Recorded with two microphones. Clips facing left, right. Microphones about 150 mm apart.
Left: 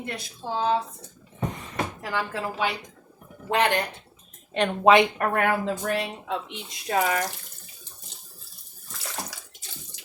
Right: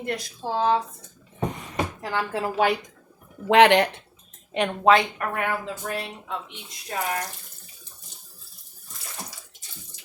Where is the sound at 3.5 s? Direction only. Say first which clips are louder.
Right 8 dB; 90° right.